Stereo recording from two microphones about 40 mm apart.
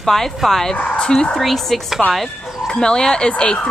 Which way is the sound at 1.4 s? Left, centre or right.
Centre.